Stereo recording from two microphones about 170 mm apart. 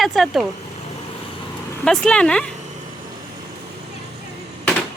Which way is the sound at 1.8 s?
5° left (ahead or behind).